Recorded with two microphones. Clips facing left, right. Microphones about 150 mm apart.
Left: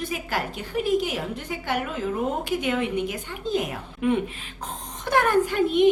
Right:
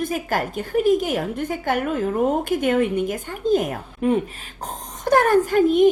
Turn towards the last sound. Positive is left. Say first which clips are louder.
# right 4 dB
turn(degrees=-45)  # may be behind; listen again after turning